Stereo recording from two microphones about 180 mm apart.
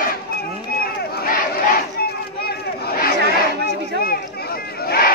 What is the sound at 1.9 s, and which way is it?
Chatter, 60° left (ahead or behind).